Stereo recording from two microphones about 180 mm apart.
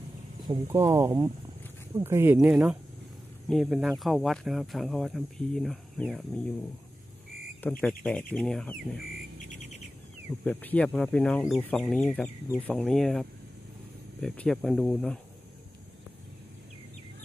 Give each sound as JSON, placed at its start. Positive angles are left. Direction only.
{"t": 0.7, "sound": "speech", "side_deg": -15}
{"t": 7.8, "sound": "speech", "side_deg": 5}
{"t": 10.4, "sound": "speech", "side_deg": 10}